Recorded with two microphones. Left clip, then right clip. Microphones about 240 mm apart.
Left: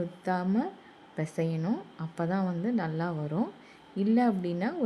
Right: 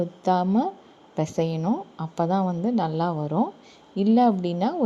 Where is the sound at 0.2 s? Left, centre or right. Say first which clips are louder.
Right 9 dB; centre.